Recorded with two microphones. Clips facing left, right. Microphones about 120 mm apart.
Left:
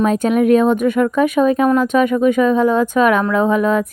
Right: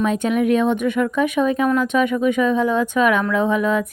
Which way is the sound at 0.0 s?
45° left (ahead or behind).